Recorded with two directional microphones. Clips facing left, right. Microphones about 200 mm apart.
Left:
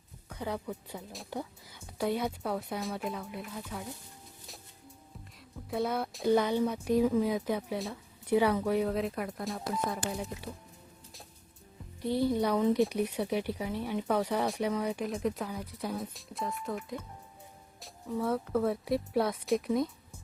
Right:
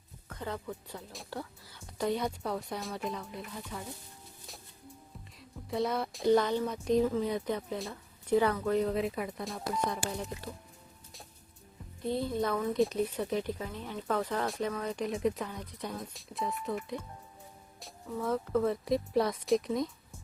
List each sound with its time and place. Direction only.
0.3 s speech: 10° left (ahead or behind)
5.7 s speech: centre (ahead or behind)
12.0 s speech: 10° left (ahead or behind)